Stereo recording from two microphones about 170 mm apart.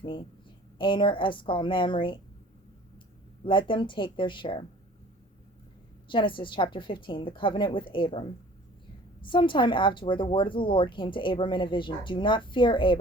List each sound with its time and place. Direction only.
0.8 s speech: 30° left (ahead or behind)
3.4 s speech: 30° left (ahead or behind)
6.1 s speech: 30° left (ahead or behind)
9.2 s speech: 30° left (ahead or behind)